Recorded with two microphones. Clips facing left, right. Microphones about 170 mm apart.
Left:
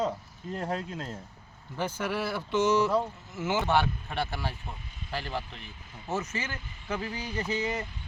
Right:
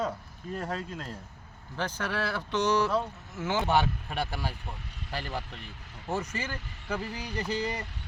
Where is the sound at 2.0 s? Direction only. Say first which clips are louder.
Left 1 dB; 10° left (ahead or behind).